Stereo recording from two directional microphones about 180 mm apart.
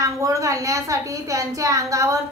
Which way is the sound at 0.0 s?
15° right (ahead or behind).